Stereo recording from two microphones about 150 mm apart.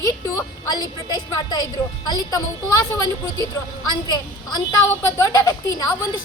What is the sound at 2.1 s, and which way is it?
Speech, 25° left (ahead or behind).